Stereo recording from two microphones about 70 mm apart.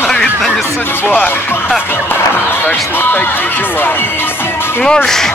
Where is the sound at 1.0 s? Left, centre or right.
Left.